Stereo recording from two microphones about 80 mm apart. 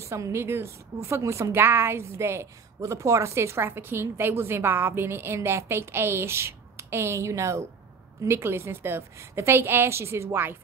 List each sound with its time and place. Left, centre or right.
0.0 s a woman's voice: right